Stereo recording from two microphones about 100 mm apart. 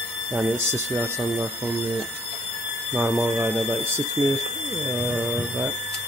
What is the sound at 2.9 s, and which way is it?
Speech, 20° right (ahead or behind).